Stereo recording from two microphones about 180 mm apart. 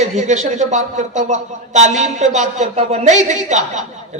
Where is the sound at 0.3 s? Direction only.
40° right (ahead or behind).